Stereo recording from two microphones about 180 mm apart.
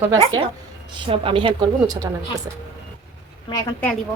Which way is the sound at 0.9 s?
30° right (ahead or behind).